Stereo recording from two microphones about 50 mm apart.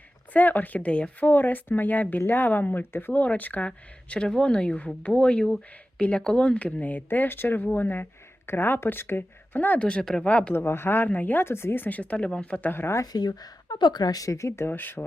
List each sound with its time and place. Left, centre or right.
0.3 s speech: left
1.2 s speech: left
9.7 s speech: left
10.2 s speech: left
10.5 s speech: left
11.0 s speech: left
11.4 s speech: left
11.8 s speech: left
12.6 s speech: left
14.3 s speech: left
14.7 s speech: left